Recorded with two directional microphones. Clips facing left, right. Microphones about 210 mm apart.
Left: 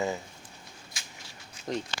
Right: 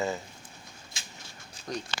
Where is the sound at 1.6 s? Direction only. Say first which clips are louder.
Left 3 dB; 35° right (ahead or behind).